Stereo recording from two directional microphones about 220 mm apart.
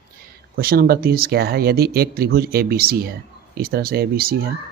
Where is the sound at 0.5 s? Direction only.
40° right (ahead or behind).